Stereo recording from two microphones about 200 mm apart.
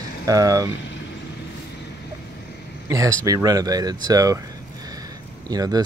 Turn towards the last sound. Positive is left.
turn(degrees=-20)  # may be behind; listen again after turning